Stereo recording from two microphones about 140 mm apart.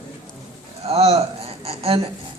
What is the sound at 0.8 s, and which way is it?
Speech, 45° right (ahead or behind).